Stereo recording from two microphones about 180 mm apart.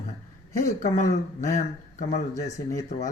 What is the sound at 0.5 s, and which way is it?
Speech, 45° left (ahead or behind).